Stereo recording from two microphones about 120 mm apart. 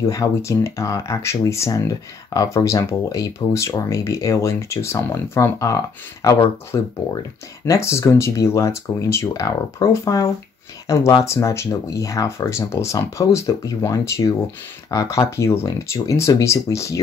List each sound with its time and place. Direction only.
0.1 s speech: 25° left (ahead or behind)